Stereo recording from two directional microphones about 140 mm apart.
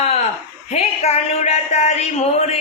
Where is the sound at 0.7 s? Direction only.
50° left (ahead or behind).